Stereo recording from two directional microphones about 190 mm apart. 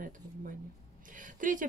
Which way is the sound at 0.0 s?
45° right (ahead or behind).